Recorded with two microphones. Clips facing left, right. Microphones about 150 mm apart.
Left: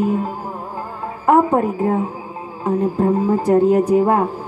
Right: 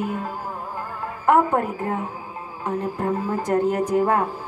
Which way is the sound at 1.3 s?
30° left (ahead or behind).